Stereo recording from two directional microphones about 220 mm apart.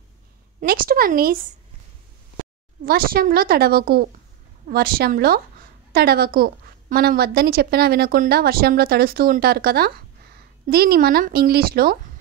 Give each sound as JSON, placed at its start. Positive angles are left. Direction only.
{"t": 0.6, "sound": "speech", "side_deg": -40}
{"t": 2.8, "sound": "a woman's voice", "side_deg": -40}